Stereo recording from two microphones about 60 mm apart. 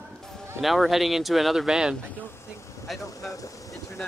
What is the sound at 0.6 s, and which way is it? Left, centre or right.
Speech, centre.